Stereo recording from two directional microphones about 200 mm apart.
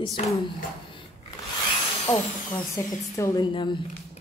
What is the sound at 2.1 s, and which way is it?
Speech, 10° left (ahead or behind).